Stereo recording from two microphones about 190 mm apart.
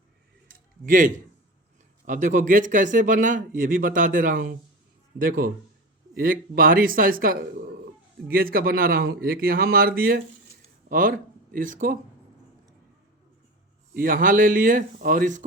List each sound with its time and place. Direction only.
0.4 s a sound: 45° right (ahead or behind)
2.0 s speech: 45° right (ahead or behind)
13.9 s speech: 50° right (ahead or behind)